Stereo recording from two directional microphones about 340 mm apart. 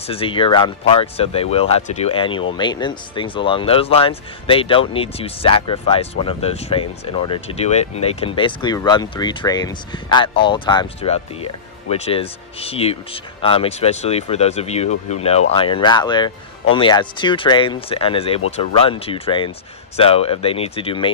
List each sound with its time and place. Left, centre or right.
0.1 s speech: centre